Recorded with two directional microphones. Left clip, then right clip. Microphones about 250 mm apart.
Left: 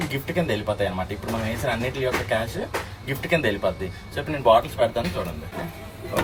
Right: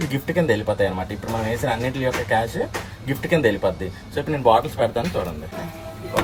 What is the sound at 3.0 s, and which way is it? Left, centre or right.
Speech, right.